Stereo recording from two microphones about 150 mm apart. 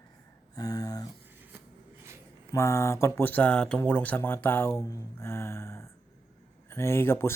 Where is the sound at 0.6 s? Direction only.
25° left (ahead or behind).